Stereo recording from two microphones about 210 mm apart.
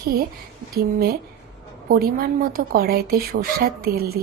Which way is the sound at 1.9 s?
45° right (ahead or behind).